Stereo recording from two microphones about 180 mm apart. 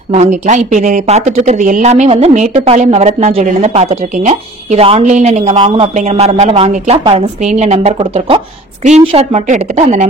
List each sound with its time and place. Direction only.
0.1 s speech: 40° right (ahead or behind)